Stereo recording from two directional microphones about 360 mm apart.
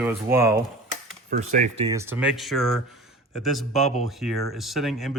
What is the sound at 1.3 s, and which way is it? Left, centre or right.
Speech, centre.